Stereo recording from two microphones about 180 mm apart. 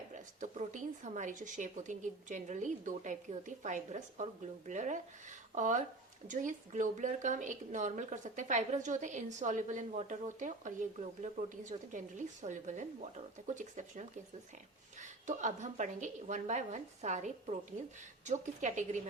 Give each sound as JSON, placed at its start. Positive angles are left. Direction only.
{"t": 0.1, "sound": "a woman's voice", "side_deg": -45}